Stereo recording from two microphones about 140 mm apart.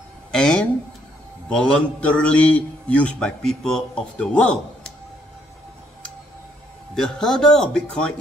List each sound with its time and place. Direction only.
0.3 s a sound: 5° left (ahead or behind)
1.5 s a man's voice: 5° left (ahead or behind)
7.0 s speech: 5° left (ahead or behind)